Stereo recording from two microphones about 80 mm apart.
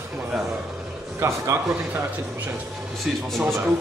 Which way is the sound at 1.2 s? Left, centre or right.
Right.